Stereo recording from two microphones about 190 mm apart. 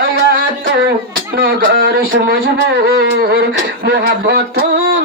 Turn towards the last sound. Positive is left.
turn(degrees=-60)  # may be behind; listen again after turning